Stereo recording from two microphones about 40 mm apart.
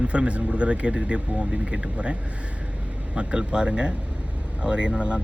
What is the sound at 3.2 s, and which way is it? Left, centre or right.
Speech, right.